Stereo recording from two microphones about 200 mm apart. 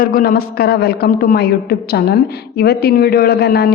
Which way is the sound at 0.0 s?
45° left (ahead or behind).